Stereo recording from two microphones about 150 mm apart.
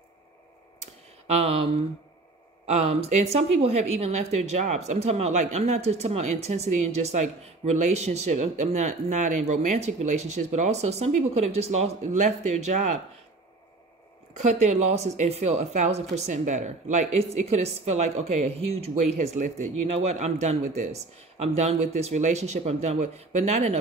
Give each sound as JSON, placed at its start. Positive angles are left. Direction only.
{"t": 1.2, "sound": "speech", "side_deg": -45}
{"t": 14.3, "sound": "speech", "side_deg": -50}